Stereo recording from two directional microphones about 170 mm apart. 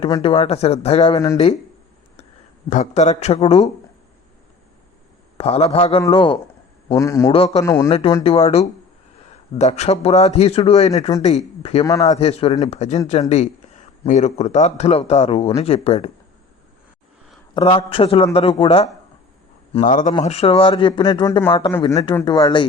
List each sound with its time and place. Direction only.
0.2 s a man's voice: 35° left (ahead or behind)
2.6 s a man's voice: 45° left (ahead or behind)
5.4 s a man's voice: 40° left (ahead or behind)
6.8 s speech: 20° left (ahead or behind)
7.3 s a man's voice: 35° left (ahead or behind)
7.6 s speech: 15° left (ahead or behind)
7.9 s a man's voice: 35° left (ahead or behind)
17.5 s a man's voice: 30° left (ahead or behind)
19.8 s speech: 50° left (ahead or behind)
20.2 s speech: 35° left (ahead or behind)